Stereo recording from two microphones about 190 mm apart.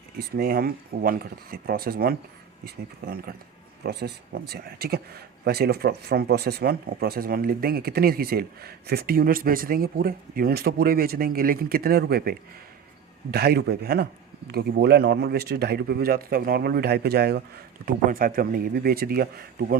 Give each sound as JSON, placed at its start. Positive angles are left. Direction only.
{"t": 0.2, "sound": "speech", "side_deg": -55}